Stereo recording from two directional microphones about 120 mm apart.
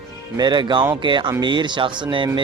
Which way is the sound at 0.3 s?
40° right (ahead or behind).